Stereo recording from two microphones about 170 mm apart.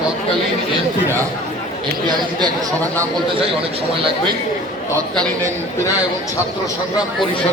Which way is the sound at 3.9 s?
30° right (ahead or behind).